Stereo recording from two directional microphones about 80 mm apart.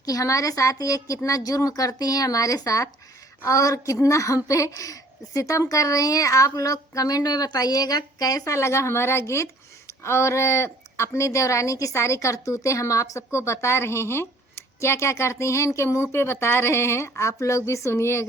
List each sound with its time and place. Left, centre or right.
0.0 s a woman's voice: left